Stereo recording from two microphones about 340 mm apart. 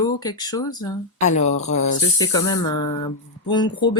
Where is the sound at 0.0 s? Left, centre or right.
Centre.